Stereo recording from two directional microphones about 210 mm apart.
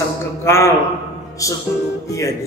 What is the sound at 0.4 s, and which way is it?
A man's voice, 10° left (ahead or behind).